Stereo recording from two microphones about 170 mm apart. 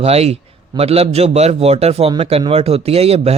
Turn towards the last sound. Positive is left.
turn(degrees=-35)  # may be behind; listen again after turning